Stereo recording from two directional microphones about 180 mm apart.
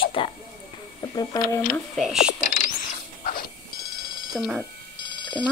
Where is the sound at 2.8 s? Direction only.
50° left (ahead or behind).